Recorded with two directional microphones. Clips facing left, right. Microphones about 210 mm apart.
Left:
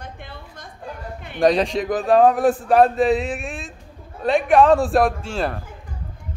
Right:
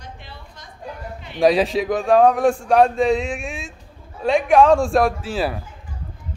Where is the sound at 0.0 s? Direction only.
55° left (ahead or behind).